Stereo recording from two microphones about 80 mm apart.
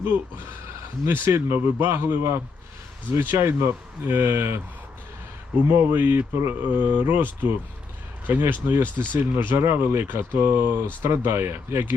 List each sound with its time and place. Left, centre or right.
1.0 s speech: right
5.7 s speech: right